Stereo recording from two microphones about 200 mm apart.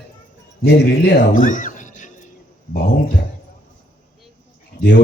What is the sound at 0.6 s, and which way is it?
Speech, 50° left (ahead or behind).